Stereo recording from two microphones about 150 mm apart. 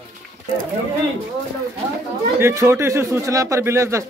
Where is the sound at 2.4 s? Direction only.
20° right (ahead or behind).